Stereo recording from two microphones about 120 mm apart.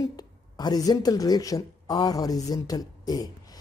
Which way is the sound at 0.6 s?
35° left (ahead or behind).